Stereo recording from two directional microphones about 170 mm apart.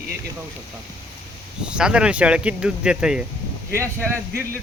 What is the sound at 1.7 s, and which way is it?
Speech, 5° right (ahead or behind).